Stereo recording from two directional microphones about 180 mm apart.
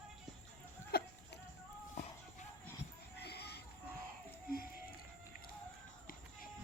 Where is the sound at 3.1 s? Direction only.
65° left (ahead or behind).